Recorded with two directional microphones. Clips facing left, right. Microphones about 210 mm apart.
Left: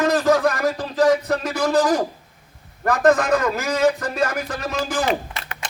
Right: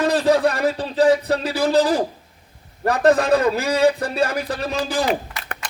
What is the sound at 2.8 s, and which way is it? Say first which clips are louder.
Music: right 1 dB; 35° right (ahead or behind).